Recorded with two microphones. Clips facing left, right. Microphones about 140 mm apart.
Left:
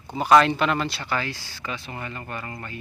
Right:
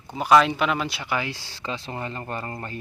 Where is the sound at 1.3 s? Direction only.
25° right (ahead or behind).